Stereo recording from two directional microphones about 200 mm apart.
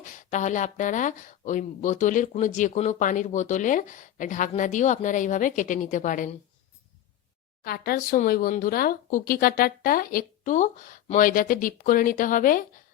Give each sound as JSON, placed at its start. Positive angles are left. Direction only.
{"t": 0.0, "sound": "speech", "side_deg": 35}
{"t": 7.6, "sound": "speech", "side_deg": 50}